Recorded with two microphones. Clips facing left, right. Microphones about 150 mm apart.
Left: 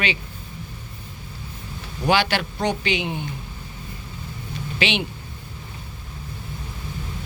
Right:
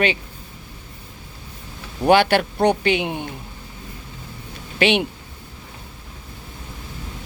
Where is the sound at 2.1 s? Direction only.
50° right (ahead or behind).